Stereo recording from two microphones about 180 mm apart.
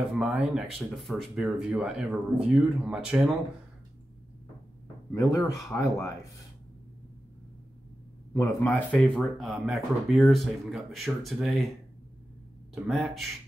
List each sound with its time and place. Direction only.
0.1 s speech: 5° right (ahead or behind)
5.1 s speech: 15° left (ahead or behind)
8.3 s speech: 15° left (ahead or behind)
8.9 s speech: centre (ahead or behind)
12.8 s speech: centre (ahead or behind)